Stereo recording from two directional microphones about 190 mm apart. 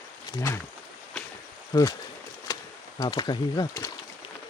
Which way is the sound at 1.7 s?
20° left (ahead or behind).